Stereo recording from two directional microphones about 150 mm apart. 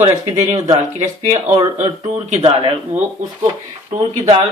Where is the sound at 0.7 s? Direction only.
45° right (ahead or behind).